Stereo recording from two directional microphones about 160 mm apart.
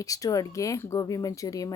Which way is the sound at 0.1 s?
20° left (ahead or behind).